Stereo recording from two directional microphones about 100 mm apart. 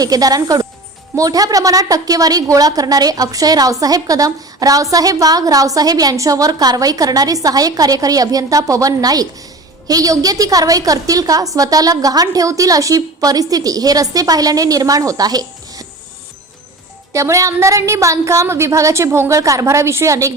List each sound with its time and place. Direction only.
0.0 s a woman's voice: 40° right (ahead or behind)
17.1 s a woman's voice: 30° right (ahead or behind)